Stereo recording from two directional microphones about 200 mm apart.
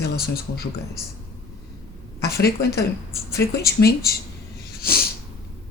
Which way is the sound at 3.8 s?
45° left (ahead or behind).